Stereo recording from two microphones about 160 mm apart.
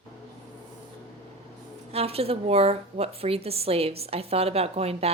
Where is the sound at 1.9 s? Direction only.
40° right (ahead or behind).